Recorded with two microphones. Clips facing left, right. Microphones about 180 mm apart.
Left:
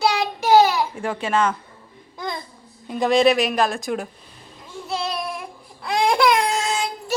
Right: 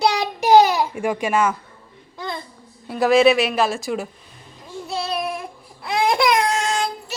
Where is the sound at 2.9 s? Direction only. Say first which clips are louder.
Right 2 dB; 5° right (ahead or behind).